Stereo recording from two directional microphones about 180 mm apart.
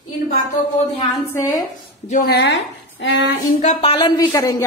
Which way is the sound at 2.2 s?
70° left (ahead or behind).